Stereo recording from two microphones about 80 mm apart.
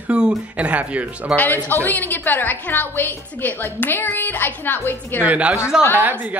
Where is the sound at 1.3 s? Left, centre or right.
Left.